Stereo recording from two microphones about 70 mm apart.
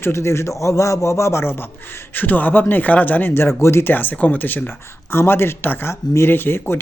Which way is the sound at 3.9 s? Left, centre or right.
Left.